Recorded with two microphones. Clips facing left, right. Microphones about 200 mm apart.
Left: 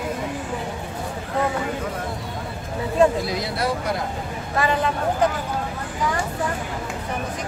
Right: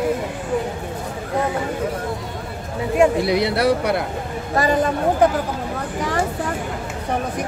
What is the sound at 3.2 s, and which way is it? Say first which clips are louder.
Speech: right 7 dB; 65° right (ahead or behind).